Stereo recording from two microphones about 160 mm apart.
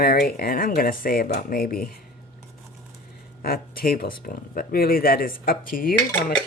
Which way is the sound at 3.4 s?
65° left (ahead or behind).